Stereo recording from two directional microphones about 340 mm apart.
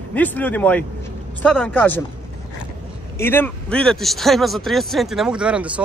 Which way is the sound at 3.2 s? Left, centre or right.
Centre.